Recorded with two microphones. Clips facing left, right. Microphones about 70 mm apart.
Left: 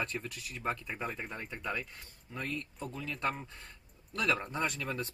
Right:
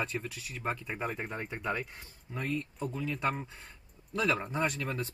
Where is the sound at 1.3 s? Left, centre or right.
Centre.